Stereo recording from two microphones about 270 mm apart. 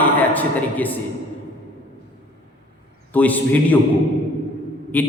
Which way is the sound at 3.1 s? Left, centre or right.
Centre.